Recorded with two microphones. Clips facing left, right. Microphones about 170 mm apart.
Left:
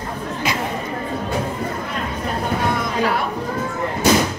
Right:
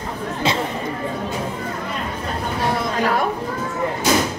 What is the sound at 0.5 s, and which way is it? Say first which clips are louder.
Chatter: right 3 dB; 25° right (ahead or behind).